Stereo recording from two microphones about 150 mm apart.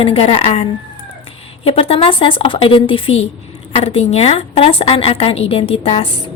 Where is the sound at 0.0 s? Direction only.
40° left (ahead or behind).